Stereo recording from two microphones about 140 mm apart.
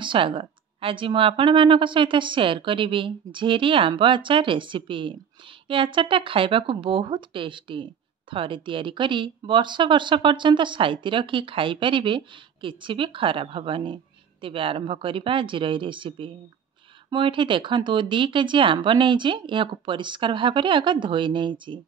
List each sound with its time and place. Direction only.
0.0 s speech: 35° right (ahead or behind)